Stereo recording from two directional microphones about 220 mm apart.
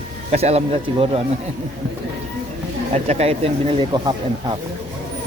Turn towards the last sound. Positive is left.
turn(degrees=-20)  # may be behind; listen again after turning